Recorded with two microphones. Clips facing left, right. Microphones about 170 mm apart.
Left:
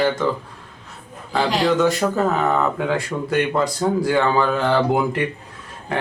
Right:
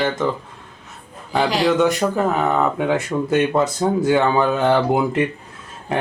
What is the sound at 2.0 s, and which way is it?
Speech, 5° right (ahead or behind).